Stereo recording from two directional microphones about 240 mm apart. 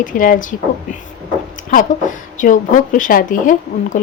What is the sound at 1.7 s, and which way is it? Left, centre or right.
A woman's voice, left.